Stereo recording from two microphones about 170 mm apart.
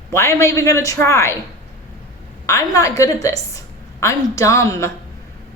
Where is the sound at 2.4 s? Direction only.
15° left (ahead or behind).